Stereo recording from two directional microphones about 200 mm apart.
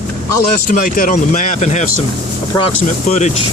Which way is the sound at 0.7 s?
45° left (ahead or behind).